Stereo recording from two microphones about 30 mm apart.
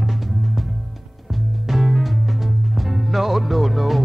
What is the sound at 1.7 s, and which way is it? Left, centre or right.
Music, centre.